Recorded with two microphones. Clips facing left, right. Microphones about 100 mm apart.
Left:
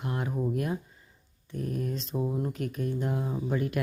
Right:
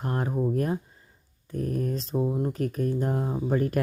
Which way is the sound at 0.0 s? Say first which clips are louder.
Right 4 dB; 40° right (ahead or behind).